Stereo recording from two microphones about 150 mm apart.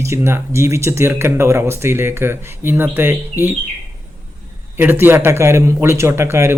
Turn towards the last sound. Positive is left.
turn(degrees=-15)  # may be behind; listen again after turning